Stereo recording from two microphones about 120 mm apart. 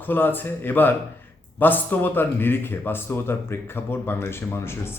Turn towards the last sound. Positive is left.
turn(degrees=20)  # may be behind; listen again after turning